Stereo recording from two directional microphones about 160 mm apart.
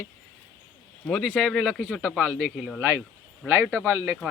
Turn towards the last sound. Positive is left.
turn(degrees=-15)  # may be behind; listen again after turning